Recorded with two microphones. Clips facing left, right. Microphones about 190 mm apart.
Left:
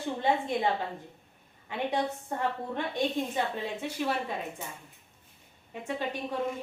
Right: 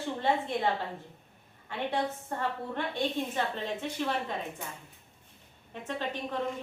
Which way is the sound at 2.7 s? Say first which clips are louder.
Left 1 dB; 15° left (ahead or behind).